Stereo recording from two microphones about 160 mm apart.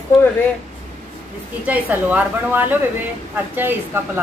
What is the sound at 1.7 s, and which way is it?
A woman's voice, 10° right (ahead or behind).